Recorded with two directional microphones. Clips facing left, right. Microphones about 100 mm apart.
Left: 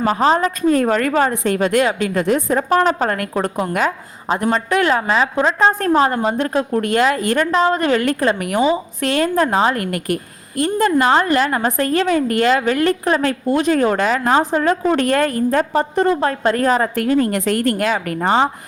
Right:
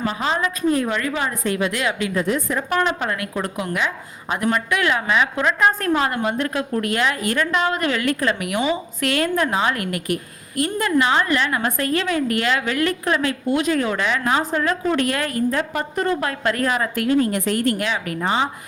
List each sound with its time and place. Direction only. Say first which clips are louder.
0.0 s a woman's voice: left 7 dB; 40° left (ahead or behind)
2.6 s a woman's voice: left 6 dB; 35° left (ahead or behind)